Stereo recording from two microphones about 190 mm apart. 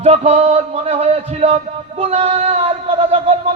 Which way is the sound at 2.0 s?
30° right (ahead or behind).